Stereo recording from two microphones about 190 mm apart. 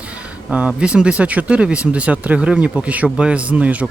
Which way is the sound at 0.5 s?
5° right (ahead or behind).